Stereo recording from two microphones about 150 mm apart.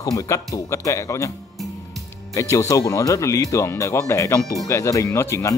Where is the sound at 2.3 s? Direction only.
20° left (ahead or behind).